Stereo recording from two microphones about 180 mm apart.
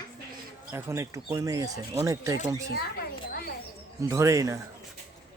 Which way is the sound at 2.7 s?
60° left (ahead or behind).